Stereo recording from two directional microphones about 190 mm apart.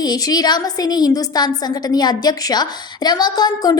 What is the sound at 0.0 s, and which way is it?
A woman's voice, 20° left (ahead or behind).